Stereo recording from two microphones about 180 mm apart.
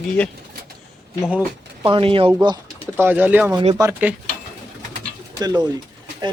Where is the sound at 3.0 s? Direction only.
10° right (ahead or behind).